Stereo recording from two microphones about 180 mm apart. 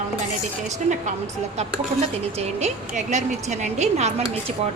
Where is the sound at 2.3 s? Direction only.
40° right (ahead or behind).